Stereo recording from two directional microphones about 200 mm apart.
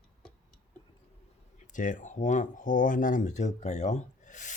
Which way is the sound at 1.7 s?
40° left (ahead or behind).